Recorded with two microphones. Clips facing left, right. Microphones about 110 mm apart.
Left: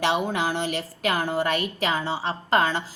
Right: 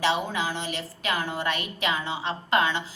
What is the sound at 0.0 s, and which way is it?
A woman's voice, 55° left (ahead or behind).